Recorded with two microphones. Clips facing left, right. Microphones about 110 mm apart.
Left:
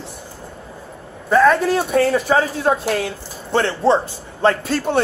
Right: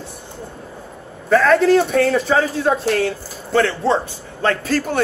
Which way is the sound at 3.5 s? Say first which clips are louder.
Left 1 dB; 25° left (ahead or behind).